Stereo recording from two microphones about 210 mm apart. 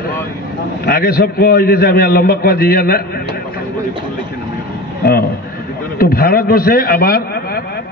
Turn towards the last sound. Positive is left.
turn(degrees=45)  # may be behind; listen again after turning